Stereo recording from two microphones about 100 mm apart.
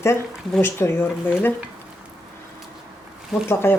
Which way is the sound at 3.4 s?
25° left (ahead or behind).